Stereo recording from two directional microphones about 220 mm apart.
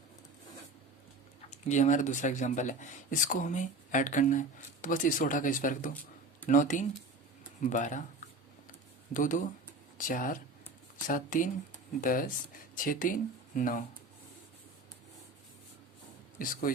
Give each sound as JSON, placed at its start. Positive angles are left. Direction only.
{"t": 1.5, "sound": "speech", "side_deg": 30}
{"t": 9.1, "sound": "speech", "side_deg": 35}
{"t": 16.4, "sound": "speech", "side_deg": 40}